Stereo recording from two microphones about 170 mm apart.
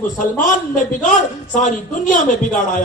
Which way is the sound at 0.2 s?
50° left (ahead or behind).